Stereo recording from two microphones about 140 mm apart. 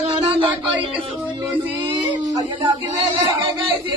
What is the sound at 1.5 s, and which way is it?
Female singing, 35° right (ahead or behind).